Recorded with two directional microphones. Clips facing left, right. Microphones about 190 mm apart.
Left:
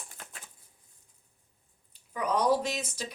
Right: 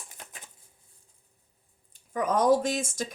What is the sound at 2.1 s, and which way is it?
Speech, 45° right (ahead or behind).